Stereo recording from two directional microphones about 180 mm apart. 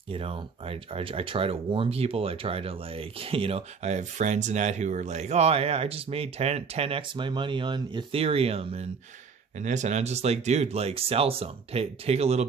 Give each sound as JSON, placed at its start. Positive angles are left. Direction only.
{"t": 0.1, "sound": "speech", "side_deg": -30}